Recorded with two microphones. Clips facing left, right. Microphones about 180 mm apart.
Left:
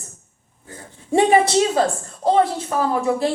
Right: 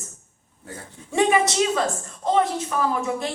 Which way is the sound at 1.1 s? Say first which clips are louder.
Left 5 dB; 30° left (ahead or behind).